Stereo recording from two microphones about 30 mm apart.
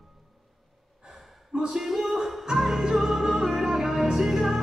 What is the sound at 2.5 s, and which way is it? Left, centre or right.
Music, centre.